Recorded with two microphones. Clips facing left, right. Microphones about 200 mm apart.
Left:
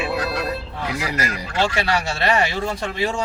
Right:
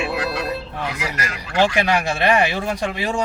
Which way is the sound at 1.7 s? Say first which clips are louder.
Right 3 dB; 15° right (ahead or behind).